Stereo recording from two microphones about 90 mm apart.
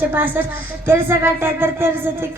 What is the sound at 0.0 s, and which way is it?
Speech, 20° right (ahead or behind).